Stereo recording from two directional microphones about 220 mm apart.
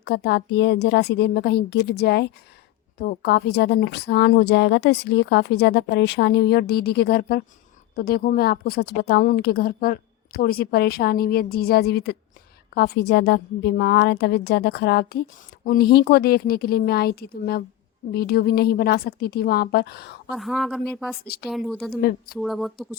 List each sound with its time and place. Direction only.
0.0 s a woman's voice: 50° left (ahead or behind)
20.3 s speech: centre (ahead or behind)